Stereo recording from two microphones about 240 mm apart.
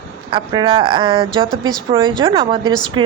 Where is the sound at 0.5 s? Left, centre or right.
Centre.